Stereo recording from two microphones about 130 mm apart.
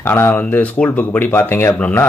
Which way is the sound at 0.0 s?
15° left (ahead or behind).